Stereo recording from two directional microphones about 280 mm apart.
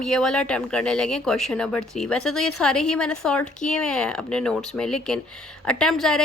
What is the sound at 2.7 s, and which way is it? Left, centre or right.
A woman's voice, centre.